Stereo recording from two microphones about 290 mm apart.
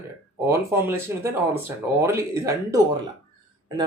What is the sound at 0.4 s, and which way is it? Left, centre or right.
Speech, centre.